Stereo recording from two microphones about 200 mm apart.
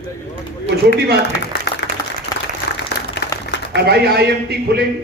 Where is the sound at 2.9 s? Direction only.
55° left (ahead or behind).